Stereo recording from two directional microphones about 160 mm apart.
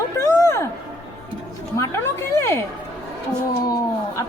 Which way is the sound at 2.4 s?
15° left (ahead or behind).